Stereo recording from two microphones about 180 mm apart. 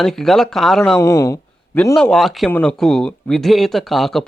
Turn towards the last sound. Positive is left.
turn(degrees=0)  # may be behind; listen again after turning